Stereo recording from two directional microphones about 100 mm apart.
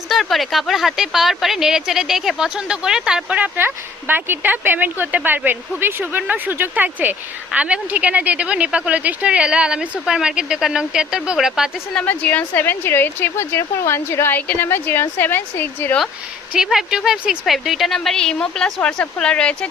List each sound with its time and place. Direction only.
0.1 s speech: centre (ahead or behind)
11.9 s a woman's voice: 15° left (ahead or behind)
16.5 s speech: 5° right (ahead or behind)